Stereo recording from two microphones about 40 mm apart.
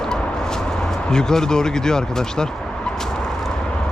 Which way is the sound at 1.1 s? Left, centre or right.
Centre.